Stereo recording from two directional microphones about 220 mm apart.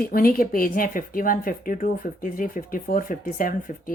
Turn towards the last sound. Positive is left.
turn(degrees=40)  # may be behind; listen again after turning